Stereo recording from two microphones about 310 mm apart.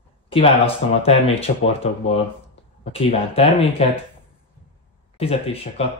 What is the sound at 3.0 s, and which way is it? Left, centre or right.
Speech, centre.